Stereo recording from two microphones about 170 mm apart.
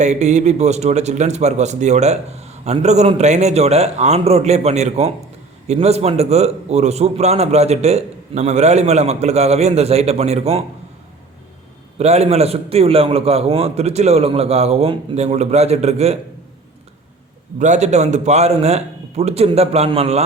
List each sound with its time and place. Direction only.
0.0 s a man's voice: 40° right (ahead or behind)
11.9 s a man's voice: 40° right (ahead or behind)
17.6 s a man's voice: 45° right (ahead or behind)